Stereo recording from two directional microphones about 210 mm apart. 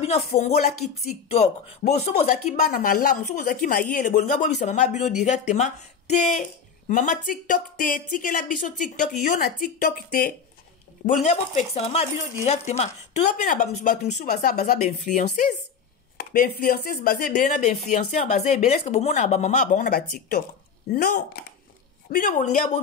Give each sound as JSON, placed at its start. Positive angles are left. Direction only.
{"t": 0.0, "sound": "speech", "side_deg": 30}
{"t": 2.3, "sound": "speech", "side_deg": 45}
{"t": 11.1, "sound": "speech", "side_deg": 35}
{"t": 16.2, "sound": "speech", "side_deg": 45}